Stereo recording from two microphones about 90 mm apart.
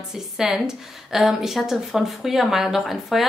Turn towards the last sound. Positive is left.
turn(degrees=0)  # may be behind; listen again after turning